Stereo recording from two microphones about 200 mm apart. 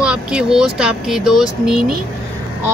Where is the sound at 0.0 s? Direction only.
5° right (ahead or behind).